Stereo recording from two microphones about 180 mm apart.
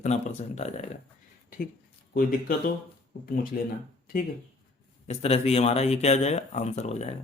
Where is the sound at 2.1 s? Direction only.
50° left (ahead or behind).